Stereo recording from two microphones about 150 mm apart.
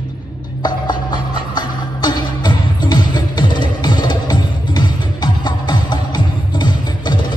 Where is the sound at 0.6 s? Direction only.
30° left (ahead or behind).